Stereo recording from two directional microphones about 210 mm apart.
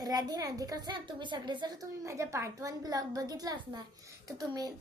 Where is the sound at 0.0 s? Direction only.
20° right (ahead or behind).